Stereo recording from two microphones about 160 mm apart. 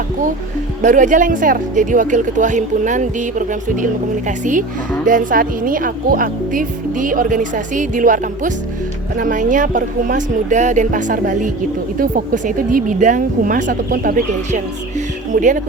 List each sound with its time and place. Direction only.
0.8 s speech: 50° right (ahead or behind)